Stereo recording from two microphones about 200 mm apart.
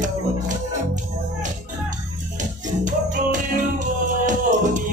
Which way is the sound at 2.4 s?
40° right (ahead or behind).